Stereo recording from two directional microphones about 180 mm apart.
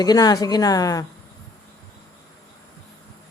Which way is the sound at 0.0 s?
20° left (ahead or behind).